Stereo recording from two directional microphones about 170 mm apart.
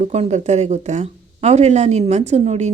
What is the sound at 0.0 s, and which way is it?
Speech, 40° right (ahead or behind).